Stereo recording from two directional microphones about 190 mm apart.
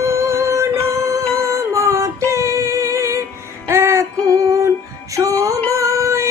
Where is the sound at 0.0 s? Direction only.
15° right (ahead or behind).